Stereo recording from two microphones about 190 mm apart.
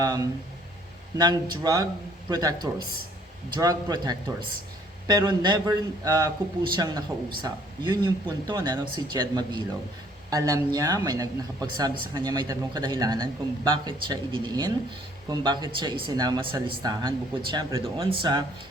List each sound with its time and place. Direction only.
1.2 s speech: 25° right (ahead or behind)